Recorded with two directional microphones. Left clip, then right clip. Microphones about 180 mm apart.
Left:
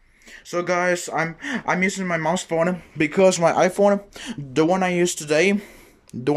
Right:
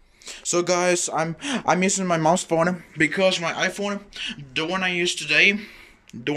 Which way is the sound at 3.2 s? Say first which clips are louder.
Left 5 dB; 35° left (ahead or behind).